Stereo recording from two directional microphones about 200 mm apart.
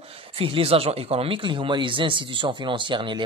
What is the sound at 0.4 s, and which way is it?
Speech, 30° right (ahead or behind).